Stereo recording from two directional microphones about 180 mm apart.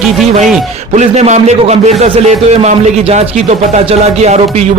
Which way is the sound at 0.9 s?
40° right (ahead or behind).